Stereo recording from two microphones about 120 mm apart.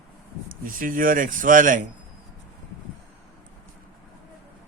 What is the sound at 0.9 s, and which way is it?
Speech, 90° right.